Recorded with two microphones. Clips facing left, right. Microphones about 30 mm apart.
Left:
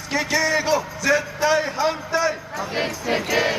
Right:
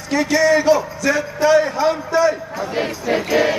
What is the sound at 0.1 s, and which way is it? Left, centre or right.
A man's voice, centre.